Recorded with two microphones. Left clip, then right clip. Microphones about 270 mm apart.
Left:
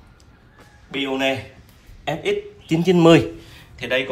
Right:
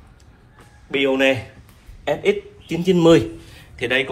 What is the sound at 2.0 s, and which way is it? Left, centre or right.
Speech, left.